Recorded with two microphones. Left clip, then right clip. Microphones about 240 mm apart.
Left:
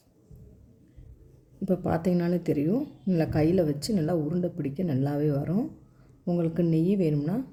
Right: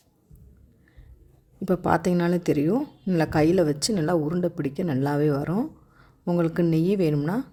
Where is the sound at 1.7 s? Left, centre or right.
Right.